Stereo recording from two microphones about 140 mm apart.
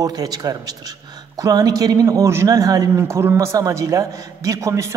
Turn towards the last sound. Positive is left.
turn(degrees=-20)  # may be behind; listen again after turning